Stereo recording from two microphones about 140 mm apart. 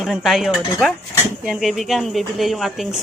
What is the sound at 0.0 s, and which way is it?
Speech, centre (ahead or behind).